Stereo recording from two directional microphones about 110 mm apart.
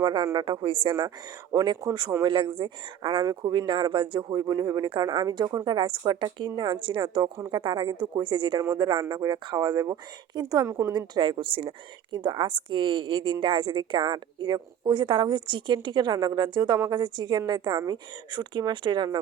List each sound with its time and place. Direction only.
0.0 s a woman's voice: 50° right (ahead or behind)
1.5 s speech: 35° right (ahead or behind)
2.2 s a woman's voice: 45° right (ahead or behind)
4.9 s a woman's voice: 45° right (ahead or behind)